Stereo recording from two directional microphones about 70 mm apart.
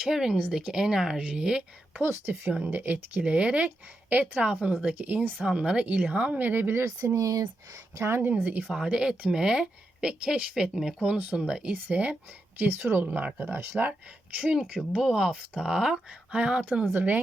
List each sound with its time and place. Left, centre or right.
0.0 s speech: centre
2.0 s speech: right
2.6 s speech: right
7.0 s speech: right
8.6 s speech: centre
12.5 s speech: right
14.4 s speech: centre